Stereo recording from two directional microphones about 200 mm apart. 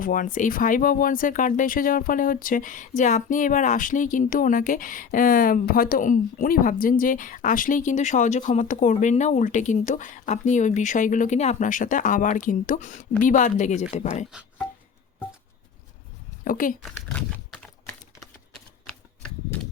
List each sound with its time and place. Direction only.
0.0 s speech: 40° left (ahead or behind)
14.3 s music: centre (ahead or behind)
16.4 s speech: 45° left (ahead or behind)
16.8 s a sound: 5° left (ahead or behind)
18.9 s typewriter: 5° left (ahead or behind)